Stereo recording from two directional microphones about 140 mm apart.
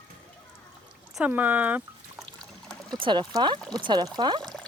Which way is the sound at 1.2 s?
10° right (ahead or behind).